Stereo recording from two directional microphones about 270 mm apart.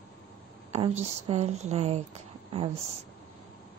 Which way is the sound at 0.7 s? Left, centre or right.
Right.